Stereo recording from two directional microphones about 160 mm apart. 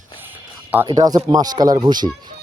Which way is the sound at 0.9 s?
25° right (ahead or behind).